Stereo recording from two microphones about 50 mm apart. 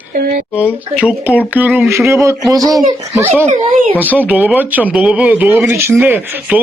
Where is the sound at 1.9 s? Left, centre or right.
Right.